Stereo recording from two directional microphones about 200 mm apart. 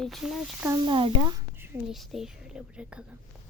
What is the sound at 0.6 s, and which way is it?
Speech, 20° right (ahead or behind).